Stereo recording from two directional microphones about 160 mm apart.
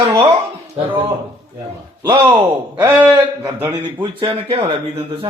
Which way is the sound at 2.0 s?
25° right (ahead or behind).